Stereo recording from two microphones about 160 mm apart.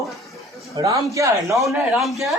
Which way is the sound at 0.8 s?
20° right (ahead or behind).